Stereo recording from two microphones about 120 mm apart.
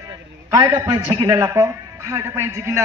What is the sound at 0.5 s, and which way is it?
Speech, 35° right (ahead or behind).